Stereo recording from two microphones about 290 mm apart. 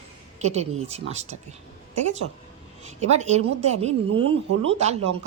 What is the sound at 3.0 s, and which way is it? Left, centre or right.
Speech, right.